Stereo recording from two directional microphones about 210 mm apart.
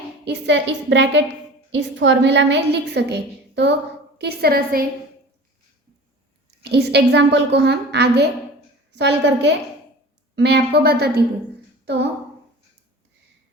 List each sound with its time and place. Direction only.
0.3 s a woman's voice: 55° right (ahead or behind)
6.6 s a woman's voice: 50° right (ahead or behind)